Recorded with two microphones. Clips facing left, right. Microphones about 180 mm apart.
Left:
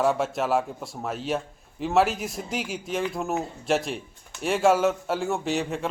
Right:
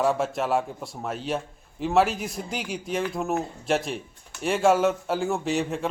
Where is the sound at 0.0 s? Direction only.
Centre (ahead or behind).